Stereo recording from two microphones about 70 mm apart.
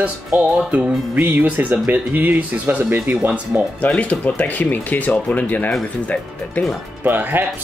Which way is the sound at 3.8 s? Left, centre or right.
Left.